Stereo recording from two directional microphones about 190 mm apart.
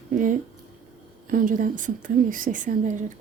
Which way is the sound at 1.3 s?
45° right (ahead or behind).